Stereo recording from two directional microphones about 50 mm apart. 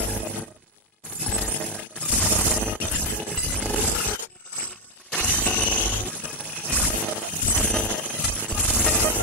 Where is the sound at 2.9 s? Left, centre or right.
Left.